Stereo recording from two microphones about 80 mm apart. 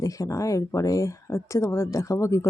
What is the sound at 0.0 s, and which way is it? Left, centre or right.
A woman's voice, left.